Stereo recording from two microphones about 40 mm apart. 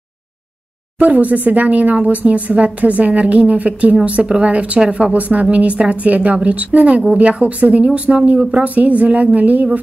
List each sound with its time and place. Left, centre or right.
0.9 s speech: right